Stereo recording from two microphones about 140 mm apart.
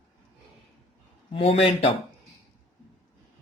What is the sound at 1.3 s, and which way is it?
Speech, 45° left (ahead or behind).